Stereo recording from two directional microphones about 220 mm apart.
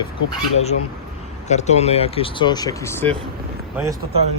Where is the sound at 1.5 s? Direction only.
30° left (ahead or behind); by 3.2 s 10° left (ahead or behind).